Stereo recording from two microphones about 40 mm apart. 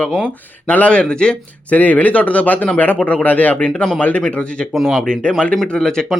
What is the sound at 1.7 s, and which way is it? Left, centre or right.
Speech, left.